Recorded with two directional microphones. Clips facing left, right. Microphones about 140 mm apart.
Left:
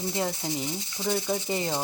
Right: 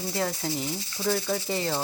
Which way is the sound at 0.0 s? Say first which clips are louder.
Even; 20° left (ahead or behind).